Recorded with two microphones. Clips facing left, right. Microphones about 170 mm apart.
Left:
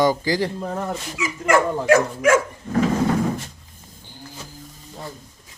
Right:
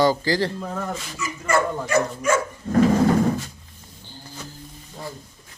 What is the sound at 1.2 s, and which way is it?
Speech, 90° left.